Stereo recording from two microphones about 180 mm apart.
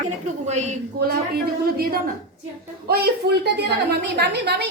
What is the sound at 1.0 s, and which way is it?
A woman's voice, 55° right (ahead or behind).